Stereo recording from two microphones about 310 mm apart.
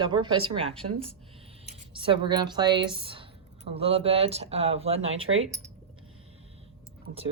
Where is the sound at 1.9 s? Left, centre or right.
Centre.